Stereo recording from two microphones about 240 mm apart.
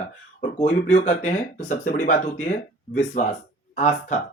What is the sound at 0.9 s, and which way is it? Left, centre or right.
Speech, left.